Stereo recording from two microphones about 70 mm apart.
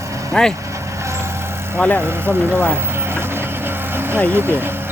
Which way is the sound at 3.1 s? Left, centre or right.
Right.